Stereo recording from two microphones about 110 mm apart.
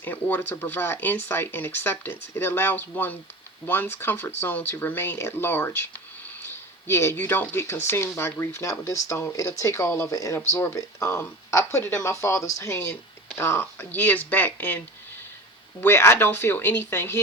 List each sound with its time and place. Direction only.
0.0 s speech: 15° left (ahead or behind)
15.8 s speech: 20° left (ahead or behind)